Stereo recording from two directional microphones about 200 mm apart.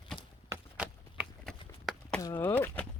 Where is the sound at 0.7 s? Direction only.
5° right (ahead or behind).